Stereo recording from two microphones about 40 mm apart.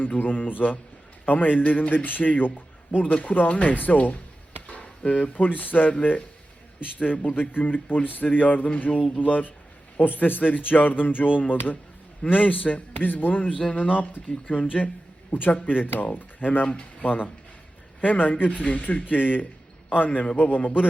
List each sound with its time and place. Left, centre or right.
0.0 s speech: left
7.3 s speech: left
7.6 s speech: left
16.6 s speech: left